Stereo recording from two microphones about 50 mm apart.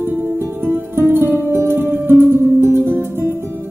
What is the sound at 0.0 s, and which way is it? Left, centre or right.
Music, right.